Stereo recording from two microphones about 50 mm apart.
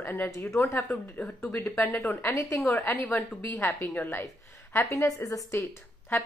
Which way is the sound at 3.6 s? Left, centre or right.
Left.